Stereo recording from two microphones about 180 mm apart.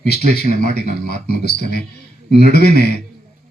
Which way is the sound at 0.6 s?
60° left (ahead or behind).